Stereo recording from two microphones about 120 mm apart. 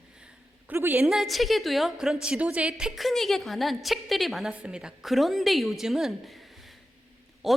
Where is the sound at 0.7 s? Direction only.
15° right (ahead or behind).